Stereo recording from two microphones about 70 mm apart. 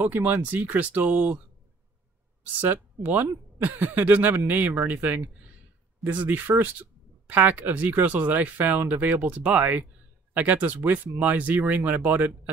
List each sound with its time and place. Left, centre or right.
0.0 s speech: right
2.4 s speech: right